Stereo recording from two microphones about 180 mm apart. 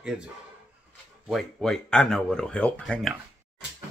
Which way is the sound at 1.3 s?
5° left (ahead or behind).